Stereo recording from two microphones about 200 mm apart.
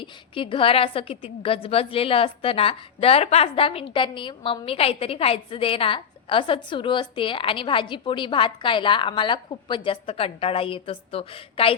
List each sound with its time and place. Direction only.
0.0 s a woman's voice: 25° left (ahead or behind)